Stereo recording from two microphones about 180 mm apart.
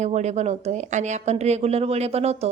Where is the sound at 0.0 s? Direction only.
40° right (ahead or behind).